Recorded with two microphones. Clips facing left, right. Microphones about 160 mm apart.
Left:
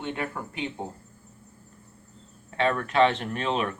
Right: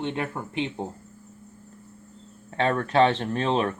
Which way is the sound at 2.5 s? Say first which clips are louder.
Right 1 dB; 30° right (ahead or behind).